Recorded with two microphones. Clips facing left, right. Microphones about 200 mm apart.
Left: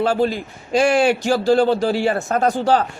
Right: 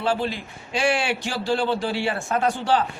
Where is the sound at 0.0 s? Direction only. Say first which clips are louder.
Left 6 dB; 45° left (ahead or behind).